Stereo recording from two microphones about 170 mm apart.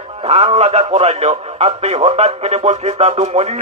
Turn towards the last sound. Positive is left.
turn(degrees=-40)  # may be behind; listen again after turning